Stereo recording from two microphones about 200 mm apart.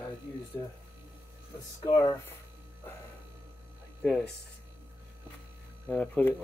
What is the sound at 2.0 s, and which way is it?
Speech, 20° left (ahead or behind).